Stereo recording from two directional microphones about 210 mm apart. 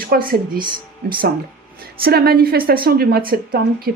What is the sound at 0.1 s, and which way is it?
Speech, 45° right (ahead or behind).